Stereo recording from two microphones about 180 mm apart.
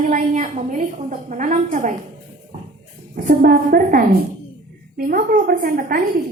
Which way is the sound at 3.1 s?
50° right (ahead or behind).